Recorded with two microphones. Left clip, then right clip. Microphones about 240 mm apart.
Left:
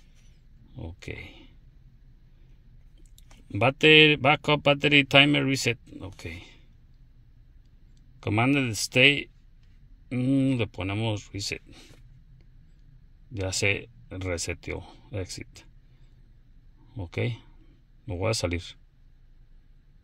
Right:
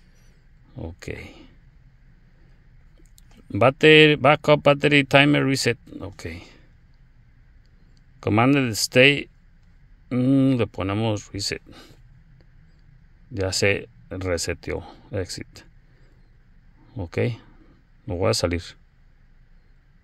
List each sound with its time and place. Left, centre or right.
0.7 s speech: right
3.4 s speech: right
8.2 s speech: right
13.3 s speech: right
16.9 s speech: right